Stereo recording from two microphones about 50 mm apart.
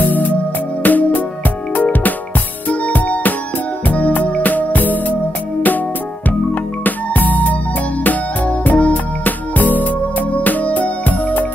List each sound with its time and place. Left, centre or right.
0.0 s music: left
6.2 s music: left